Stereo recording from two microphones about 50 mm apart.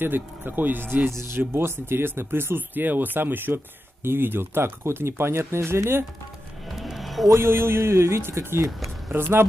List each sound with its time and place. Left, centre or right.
0.0 s speech: right
1.1 s speech: right
6.7 s music: centre
7.3 s a man's voice: right
8.2 s speech: right
9.1 s speech: right